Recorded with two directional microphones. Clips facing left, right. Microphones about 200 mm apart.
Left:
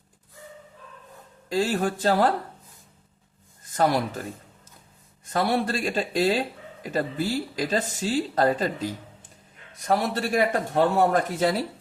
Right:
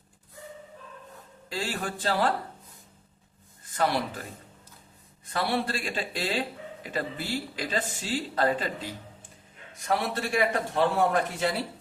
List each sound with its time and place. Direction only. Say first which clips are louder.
1.5 s speech: left 9 dB; 40° left (ahead or behind)
3.8 s speech: left 4 dB; 45° left (ahead or behind)
5.3 s speech: left 4 dB; 45° left (ahead or behind)